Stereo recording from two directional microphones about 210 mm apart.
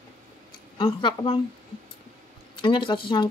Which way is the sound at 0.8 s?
20° left (ahead or behind).